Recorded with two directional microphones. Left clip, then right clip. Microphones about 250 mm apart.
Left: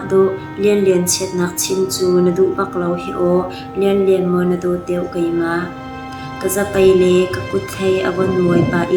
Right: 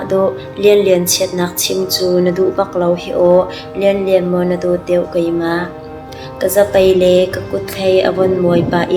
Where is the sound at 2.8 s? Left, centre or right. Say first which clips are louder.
Right 6 dB; right.